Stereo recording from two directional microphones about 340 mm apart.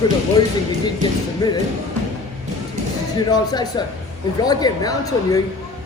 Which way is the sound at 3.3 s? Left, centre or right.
Centre.